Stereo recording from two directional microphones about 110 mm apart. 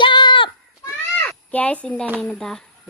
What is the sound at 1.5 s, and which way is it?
Speech, 10° left (ahead or behind).